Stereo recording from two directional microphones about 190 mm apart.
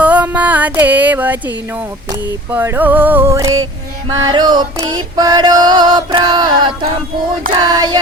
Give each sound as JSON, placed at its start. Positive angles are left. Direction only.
{"t": 0.0, "sound": "music", "side_deg": -5}
{"t": 2.5, "sound": "music", "side_deg": -10}